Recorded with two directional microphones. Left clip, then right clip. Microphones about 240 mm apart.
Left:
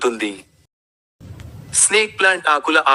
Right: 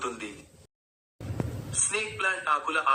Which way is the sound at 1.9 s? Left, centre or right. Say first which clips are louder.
Left 14 dB; left.